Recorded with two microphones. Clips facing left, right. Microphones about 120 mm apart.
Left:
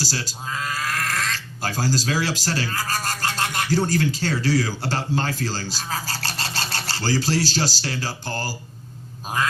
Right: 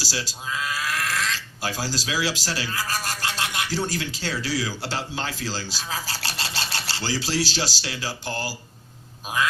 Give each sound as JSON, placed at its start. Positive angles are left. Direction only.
{"t": 0.0, "sound": "speech", "side_deg": 45}